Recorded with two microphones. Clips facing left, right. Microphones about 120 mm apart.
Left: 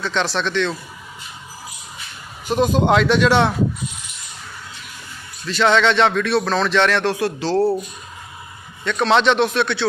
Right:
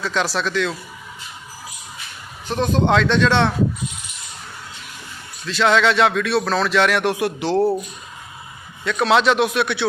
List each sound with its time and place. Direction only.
0.0 s speech: 5° right (ahead or behind)
2.5 s speech: 15° left (ahead or behind)
5.5 s speech: centre (ahead or behind)
8.8 s speech: 5° right (ahead or behind)